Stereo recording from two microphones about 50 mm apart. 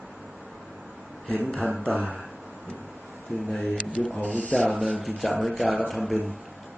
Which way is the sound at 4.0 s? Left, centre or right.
Left.